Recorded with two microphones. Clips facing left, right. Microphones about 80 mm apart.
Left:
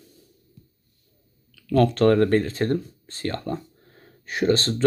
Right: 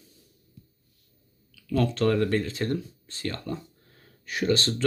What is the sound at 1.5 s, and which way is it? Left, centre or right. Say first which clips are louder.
Speech: left 6 dB; left.